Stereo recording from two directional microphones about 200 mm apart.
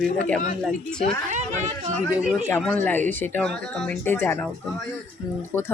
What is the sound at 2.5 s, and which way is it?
Speech, 5° left (ahead or behind).